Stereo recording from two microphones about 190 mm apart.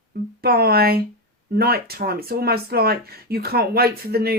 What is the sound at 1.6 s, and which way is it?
Speech, 55° right (ahead or behind).